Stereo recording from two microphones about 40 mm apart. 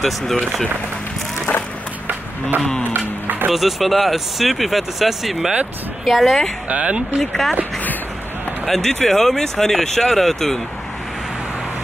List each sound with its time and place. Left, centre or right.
0.0 s speech: centre
1.5 s music: left
3.5 s speech: centre
6.7 s speech: right
7.2 s speech: centre
8.6 s speech: centre